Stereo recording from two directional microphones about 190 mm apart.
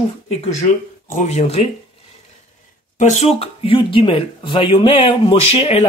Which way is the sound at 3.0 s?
35° left (ahead or behind).